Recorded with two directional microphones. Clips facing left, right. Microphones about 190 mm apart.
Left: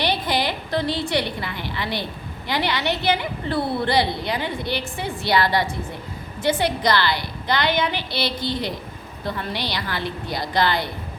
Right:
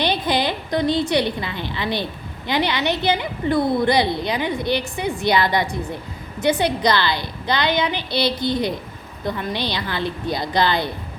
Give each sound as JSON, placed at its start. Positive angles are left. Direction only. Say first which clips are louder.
{"t": 0.0, "sound": "a woman's voice", "louder": "right 2 dB", "side_deg": -20}